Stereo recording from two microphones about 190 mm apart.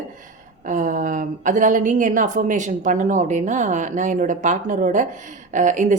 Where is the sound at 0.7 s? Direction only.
40° right (ahead or behind).